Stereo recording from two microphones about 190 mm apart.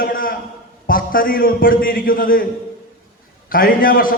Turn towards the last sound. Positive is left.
turn(degrees=50)  # may be behind; listen again after turning